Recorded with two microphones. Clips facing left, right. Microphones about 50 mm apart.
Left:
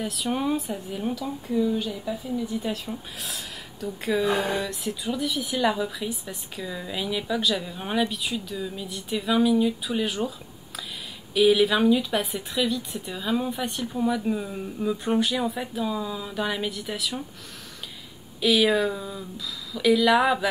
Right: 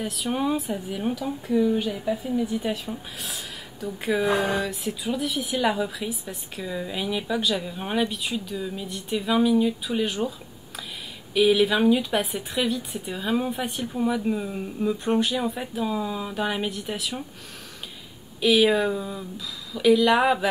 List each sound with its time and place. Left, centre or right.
0.0 s a woman's voice: centre
1.5 s speech: right
1.8 s speech: right
2.7 s a woman's voice: centre
11.3 s a woman's voice: centre
13.5 s a woman's voice: centre
18.4 s a woman's voice: centre